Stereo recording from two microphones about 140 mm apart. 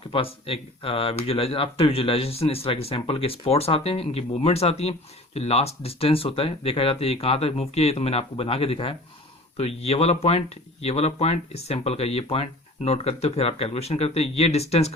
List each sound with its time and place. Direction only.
0.1 s speech: 40° left (ahead or behind)